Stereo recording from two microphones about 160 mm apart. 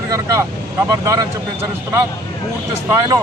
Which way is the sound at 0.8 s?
20° right (ahead or behind).